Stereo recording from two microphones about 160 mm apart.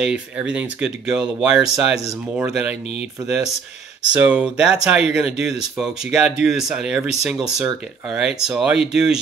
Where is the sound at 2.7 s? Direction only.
40° left (ahead or behind).